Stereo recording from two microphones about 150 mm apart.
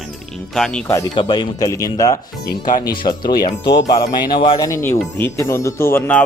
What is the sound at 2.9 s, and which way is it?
Speech, 30° left (ahead or behind).